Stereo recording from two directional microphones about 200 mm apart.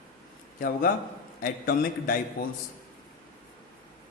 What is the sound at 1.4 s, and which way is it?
Speech, 45° left (ahead or behind).